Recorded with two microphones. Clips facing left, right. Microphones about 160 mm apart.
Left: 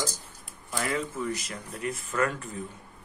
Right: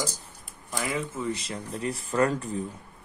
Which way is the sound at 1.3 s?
30° right (ahead or behind).